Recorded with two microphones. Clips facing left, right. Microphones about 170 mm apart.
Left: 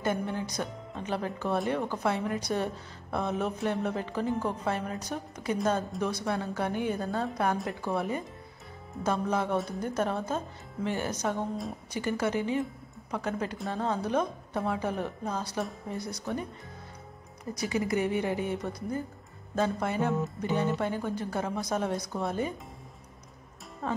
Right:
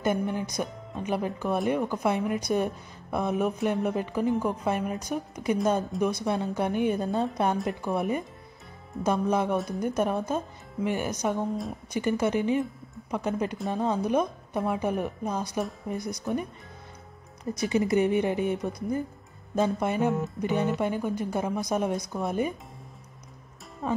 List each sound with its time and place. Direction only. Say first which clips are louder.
0.0 s a woman's voice: right 3 dB; 15° right (ahead or behind)
17.6 s a woman's voice: right 5 dB; 25° right (ahead or behind)
23.8 s speech: right 4 dB; 15° right (ahead or behind)